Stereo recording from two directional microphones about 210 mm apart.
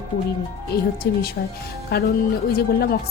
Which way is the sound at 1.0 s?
50° left (ahead or behind).